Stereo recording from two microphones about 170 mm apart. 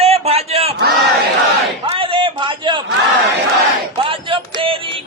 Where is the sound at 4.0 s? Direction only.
30° right (ahead or behind).